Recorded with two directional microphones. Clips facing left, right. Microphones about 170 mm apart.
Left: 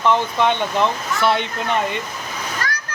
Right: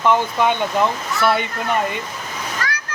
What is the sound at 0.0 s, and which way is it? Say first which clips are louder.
Speech: right 1 dB; 10° right (ahead or behind).